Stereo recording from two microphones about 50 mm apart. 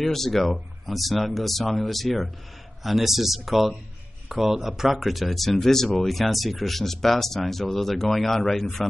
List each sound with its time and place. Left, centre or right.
0.0 s speech: centre